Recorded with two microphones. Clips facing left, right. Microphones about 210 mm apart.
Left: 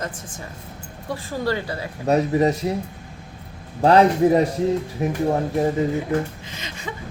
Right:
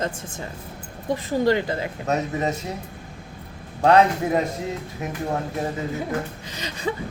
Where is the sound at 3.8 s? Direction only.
30° left (ahead or behind).